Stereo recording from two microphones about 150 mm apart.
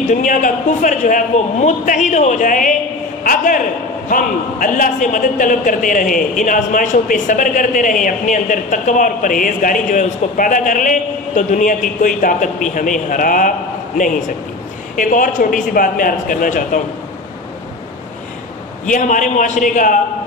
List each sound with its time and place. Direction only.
0.1 s a man's voice: 60° left (ahead or behind)
15.0 s a man's voice: 60° left (ahead or behind)
18.9 s a man's voice: 60° left (ahead or behind)